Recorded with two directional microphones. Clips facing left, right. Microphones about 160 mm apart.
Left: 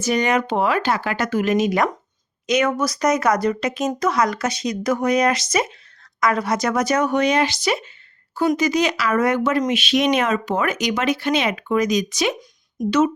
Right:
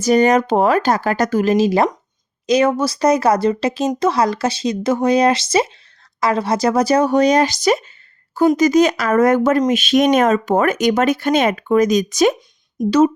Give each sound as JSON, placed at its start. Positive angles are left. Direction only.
{"t": 0.0, "sound": "speech", "side_deg": -40}